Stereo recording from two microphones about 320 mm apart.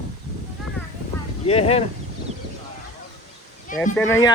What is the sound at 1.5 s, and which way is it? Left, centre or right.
Speech, centre.